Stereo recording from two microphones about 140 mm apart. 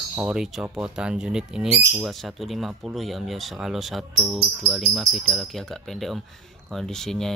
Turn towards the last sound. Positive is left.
turn(degrees=5)  # may be behind; listen again after turning